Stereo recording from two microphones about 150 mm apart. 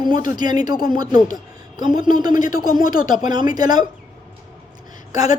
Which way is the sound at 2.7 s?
25° right (ahead or behind).